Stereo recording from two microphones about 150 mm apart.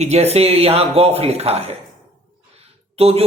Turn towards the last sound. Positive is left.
turn(degrees=-40)  # may be behind; listen again after turning